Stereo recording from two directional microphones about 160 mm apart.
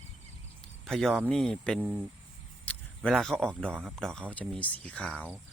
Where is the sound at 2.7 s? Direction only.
5° left (ahead or behind).